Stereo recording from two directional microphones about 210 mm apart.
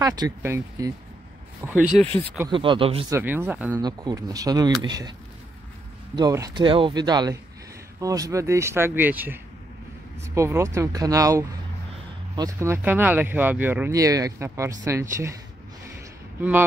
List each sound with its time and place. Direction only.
0.0 s speech: 15° right (ahead or behind)
2.5 s speech: 25° right (ahead or behind)
3.1 s speech: 10° right (ahead or behind)
6.1 s speech: 15° right (ahead or behind)
16.3 s speech: 10° right (ahead or behind)